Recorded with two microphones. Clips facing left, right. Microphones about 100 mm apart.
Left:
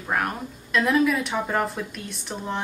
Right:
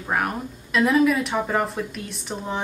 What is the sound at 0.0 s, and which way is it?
Speech, 5° right (ahead or behind).